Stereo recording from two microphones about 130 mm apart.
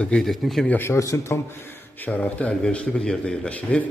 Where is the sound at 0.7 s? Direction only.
20° left (ahead or behind).